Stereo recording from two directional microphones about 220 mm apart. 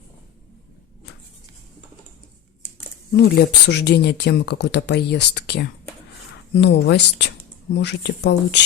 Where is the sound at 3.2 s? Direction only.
50° left (ahead or behind).